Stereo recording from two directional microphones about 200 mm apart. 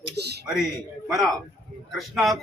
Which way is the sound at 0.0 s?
55° right (ahead or behind).